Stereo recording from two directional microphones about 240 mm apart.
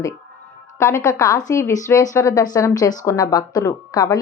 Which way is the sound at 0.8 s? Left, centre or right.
Centre.